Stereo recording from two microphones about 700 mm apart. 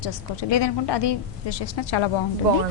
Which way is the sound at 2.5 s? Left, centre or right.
Right.